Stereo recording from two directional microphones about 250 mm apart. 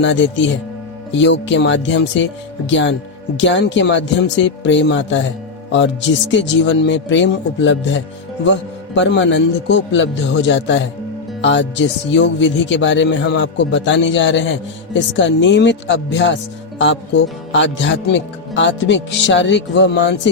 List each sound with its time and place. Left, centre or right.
0.0 s speech: left